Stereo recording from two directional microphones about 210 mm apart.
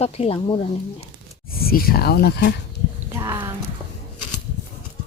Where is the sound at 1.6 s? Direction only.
45° left (ahead or behind).